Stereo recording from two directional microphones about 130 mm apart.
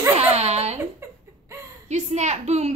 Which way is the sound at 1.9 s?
65° right (ahead or behind).